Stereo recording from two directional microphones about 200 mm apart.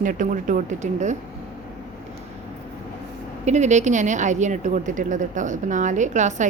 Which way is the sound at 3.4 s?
35° right (ahead or behind).